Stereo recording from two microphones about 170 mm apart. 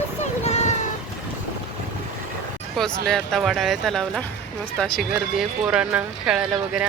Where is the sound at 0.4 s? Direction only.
40° left (ahead or behind).